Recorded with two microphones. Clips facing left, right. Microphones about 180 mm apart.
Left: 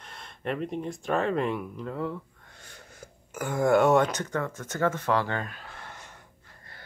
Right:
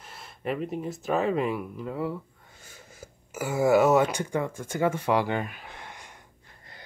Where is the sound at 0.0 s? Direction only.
5° right (ahead or behind).